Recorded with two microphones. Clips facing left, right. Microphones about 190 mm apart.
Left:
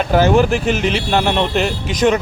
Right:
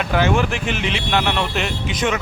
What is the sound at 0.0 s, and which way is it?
Speech, 40° left (ahead or behind).